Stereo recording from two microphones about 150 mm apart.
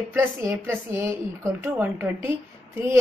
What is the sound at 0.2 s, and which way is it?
Speech, 15° right (ahead or behind).